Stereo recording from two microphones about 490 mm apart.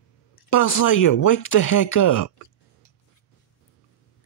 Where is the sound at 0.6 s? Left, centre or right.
Left.